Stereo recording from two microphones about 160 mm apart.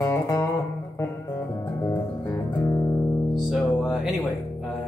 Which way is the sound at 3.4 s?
Centre (ahead or behind).